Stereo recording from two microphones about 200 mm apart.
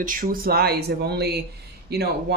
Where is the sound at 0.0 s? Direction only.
45° right (ahead or behind).